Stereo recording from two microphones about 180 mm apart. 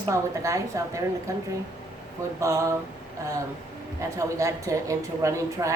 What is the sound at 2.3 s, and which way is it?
Speech, 15° right (ahead or behind).